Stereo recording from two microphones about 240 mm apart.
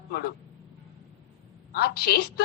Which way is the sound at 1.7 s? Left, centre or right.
Left.